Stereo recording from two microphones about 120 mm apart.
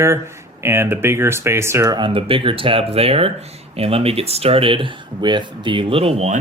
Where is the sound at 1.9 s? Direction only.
45° right (ahead or behind); by 6.4 s 65° right (ahead or behind).